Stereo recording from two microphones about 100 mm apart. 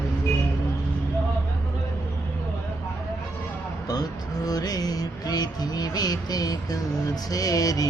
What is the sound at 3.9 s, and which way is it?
Music, 40° left (ahead or behind).